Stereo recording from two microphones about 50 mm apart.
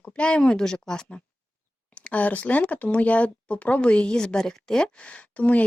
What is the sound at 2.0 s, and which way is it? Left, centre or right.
Speech, left.